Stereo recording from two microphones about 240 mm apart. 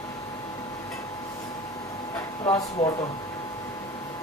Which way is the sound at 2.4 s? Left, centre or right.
Left.